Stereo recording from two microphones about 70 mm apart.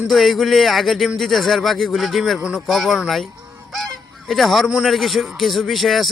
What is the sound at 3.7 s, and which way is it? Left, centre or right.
Goose, centre.